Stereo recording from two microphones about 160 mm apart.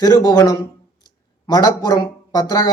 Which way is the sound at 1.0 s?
25° left (ahead or behind).